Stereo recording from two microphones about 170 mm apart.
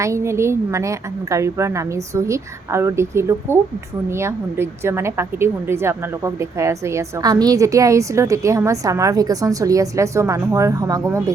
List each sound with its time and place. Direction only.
0.0 s a woman's voice: 15° right (ahead or behind)